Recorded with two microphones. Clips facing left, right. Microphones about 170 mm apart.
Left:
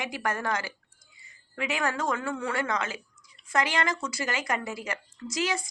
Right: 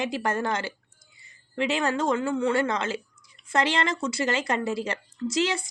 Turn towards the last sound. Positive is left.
turn(degrees=-30)  # may be behind; listen again after turning